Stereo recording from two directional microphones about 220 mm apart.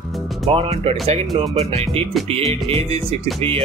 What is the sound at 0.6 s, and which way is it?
Music, 25° right (ahead or behind).